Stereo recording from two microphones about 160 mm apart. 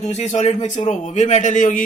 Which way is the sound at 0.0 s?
45° left (ahead or behind).